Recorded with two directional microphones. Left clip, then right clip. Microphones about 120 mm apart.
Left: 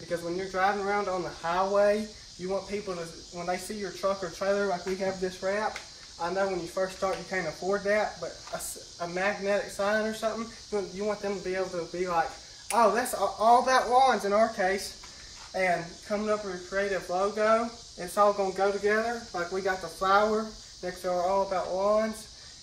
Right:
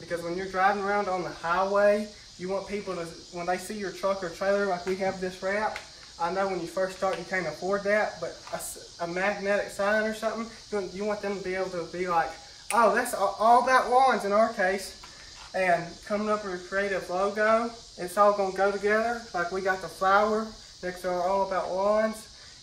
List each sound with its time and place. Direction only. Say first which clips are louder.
0.5 s speech: right 2 dB; 20° right (ahead or behind)
13.1 s speech: right 1 dB; 5° right (ahead or behind)